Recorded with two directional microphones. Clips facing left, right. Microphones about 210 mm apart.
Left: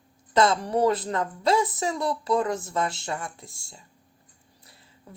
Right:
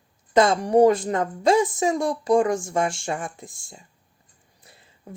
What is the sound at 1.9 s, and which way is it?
Speech, 50° right (ahead or behind).